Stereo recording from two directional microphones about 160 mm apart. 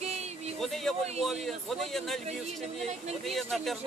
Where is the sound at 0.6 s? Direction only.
Centre (ahead or behind).